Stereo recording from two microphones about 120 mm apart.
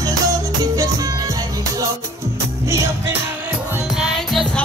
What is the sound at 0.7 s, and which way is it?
Music, 30° right (ahead or behind).